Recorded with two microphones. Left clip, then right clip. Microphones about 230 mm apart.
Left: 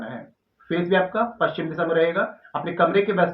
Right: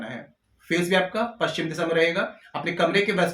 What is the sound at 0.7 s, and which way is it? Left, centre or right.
Speech, right.